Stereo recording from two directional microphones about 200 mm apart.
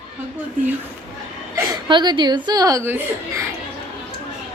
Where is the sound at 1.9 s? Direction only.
25° right (ahead or behind).